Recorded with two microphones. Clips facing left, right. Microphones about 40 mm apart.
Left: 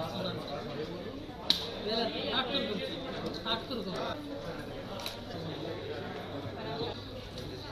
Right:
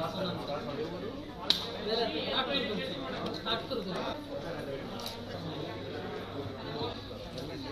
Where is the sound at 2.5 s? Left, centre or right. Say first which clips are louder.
Right 1 dB; right.